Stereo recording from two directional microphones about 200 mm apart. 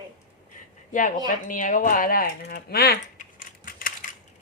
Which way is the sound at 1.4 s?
40° left (ahead or behind).